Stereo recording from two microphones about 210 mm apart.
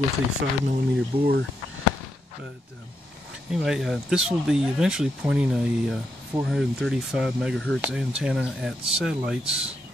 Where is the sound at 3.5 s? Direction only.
Centre (ahead or behind).